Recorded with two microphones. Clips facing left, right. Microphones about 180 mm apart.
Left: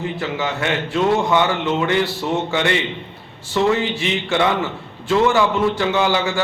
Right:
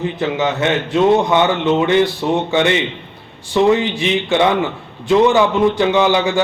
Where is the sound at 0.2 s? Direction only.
20° right (ahead or behind).